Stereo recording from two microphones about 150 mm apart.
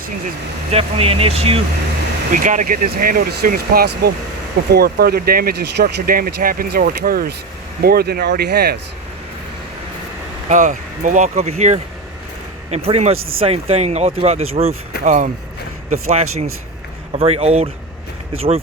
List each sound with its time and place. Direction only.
0.7 s speech: 40° right (ahead or behind)
2.3 s speech: 55° right (ahead or behind); by 8.8 s 90° right
10.5 s speech: 60° right (ahead or behind); by 14.8 s 40° right (ahead or behind)
15.0 s speech: 55° right (ahead or behind)